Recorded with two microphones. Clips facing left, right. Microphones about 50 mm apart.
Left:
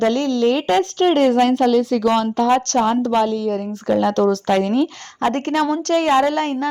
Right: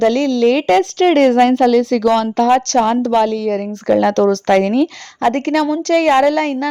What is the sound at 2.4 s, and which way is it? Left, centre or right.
Speech, right.